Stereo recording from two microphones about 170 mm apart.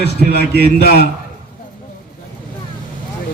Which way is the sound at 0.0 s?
70° left (ahead or behind).